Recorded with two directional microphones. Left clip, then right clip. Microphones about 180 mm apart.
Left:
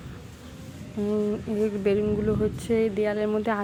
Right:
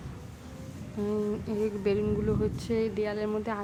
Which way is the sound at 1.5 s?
15° left (ahead or behind).